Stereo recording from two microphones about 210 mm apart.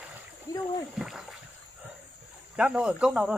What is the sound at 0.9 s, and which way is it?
Speech, centre (ahead or behind).